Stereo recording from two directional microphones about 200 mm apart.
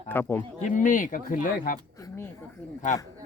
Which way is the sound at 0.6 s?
40° left (ahead or behind).